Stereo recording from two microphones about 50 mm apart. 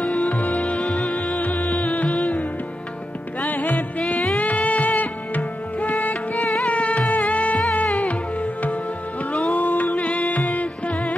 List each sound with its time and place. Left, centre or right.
0.3 s music: left
2.0 s music: left
3.4 s music: left
3.7 s music: centre
4.4 s music: left
10.9 s music: left